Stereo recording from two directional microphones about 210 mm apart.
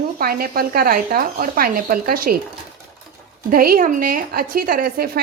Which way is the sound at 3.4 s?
45° right (ahead or behind).